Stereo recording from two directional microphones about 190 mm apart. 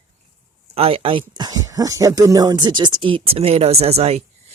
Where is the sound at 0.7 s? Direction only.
30° right (ahead or behind).